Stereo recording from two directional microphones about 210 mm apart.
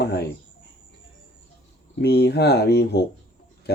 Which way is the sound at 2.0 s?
50° left (ahead or behind).